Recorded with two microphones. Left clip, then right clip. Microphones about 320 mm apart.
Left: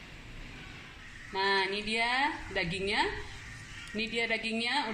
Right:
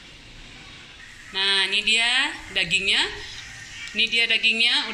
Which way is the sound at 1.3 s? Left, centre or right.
Centre.